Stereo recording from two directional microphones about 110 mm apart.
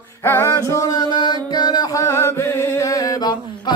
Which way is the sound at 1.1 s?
40° left (ahead or behind).